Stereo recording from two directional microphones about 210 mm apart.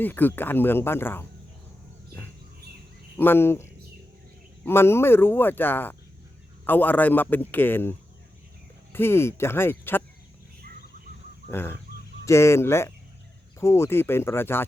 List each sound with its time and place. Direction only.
0.0 s speech: 10° left (ahead or behind)
3.2 s speech: 10° left (ahead or behind)
11.5 s speech: 10° left (ahead or behind)